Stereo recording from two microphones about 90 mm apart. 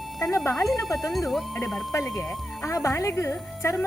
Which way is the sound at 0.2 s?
35° left (ahead or behind).